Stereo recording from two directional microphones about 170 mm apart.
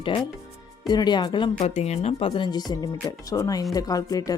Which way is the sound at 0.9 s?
25° left (ahead or behind).